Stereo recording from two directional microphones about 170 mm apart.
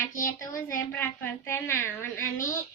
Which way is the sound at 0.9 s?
10° left (ahead or behind).